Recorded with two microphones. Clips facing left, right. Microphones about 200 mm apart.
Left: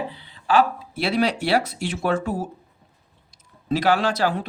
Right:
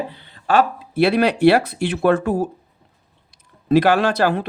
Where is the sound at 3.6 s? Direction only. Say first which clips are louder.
Right 5 dB; 60° right (ahead or behind).